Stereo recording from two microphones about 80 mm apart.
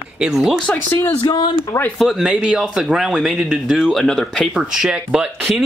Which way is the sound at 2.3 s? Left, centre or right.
Centre.